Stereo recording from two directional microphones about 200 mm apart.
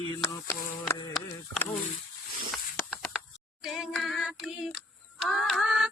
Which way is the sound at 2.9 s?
5° right (ahead or behind).